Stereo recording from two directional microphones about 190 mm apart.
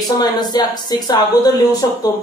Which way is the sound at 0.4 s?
20° left (ahead or behind).